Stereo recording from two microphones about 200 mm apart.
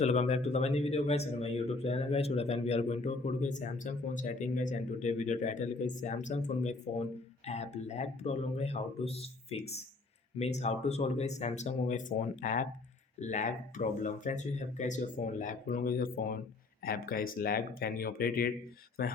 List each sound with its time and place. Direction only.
0.0 s a man's voice: 35° left (ahead or behind)